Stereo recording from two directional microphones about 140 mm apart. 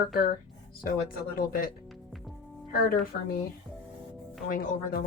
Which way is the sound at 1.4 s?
90° left.